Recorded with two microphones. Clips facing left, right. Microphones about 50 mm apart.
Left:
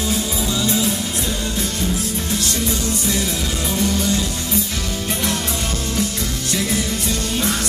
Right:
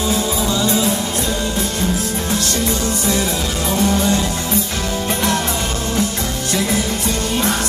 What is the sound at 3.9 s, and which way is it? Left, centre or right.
Music, right.